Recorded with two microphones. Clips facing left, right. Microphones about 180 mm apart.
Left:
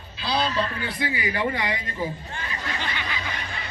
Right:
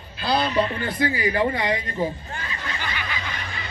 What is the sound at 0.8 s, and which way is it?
Speech, 45° right (ahead or behind).